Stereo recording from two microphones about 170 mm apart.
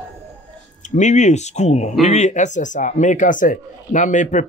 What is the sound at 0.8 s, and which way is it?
Speech, 45° left (ahead or behind).